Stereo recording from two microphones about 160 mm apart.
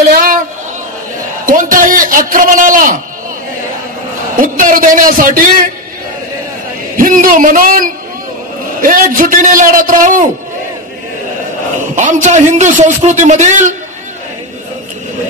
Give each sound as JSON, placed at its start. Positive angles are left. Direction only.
{"t": 0.1, "sound": "a sound", "side_deg": -60}
{"t": 1.4, "sound": "a man's voice", "side_deg": -55}
{"t": 4.4, "sound": "a man's voice", "side_deg": -55}
{"t": 7.0, "sound": "a man's voice", "side_deg": -55}
{"t": 11.9, "sound": "a man's voice", "side_deg": -50}